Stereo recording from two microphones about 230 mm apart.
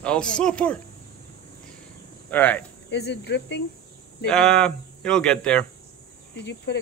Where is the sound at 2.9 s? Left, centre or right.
Left.